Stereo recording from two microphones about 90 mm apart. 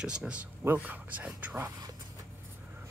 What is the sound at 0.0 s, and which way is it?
Speech, 10° right (ahead or behind).